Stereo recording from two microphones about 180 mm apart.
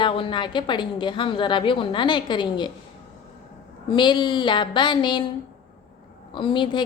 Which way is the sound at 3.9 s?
25° left (ahead or behind).